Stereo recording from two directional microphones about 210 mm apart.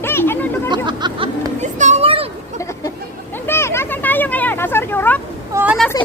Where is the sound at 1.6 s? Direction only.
35° right (ahead or behind).